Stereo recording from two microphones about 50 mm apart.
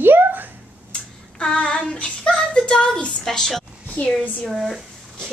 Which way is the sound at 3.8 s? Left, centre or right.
Left.